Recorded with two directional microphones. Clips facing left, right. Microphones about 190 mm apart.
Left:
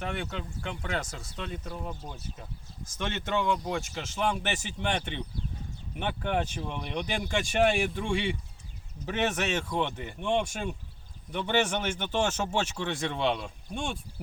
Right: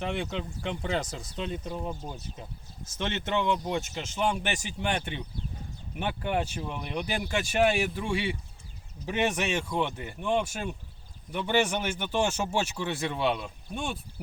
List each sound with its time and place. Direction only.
0.0 s speech: 25° right (ahead or behind); by 14.0 s 5° right (ahead or behind)